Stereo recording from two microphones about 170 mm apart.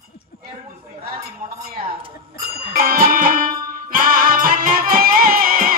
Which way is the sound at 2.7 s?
60° right (ahead or behind).